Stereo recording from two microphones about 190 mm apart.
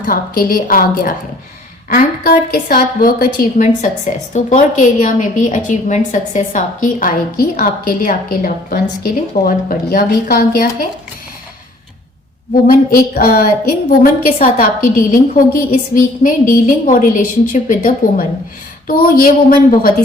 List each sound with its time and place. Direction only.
0.0 s a woman's voice: 50° left (ahead or behind)
12.6 s a woman's voice: 50° left (ahead or behind)